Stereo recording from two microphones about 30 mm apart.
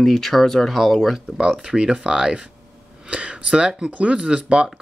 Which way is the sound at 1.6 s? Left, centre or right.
Right.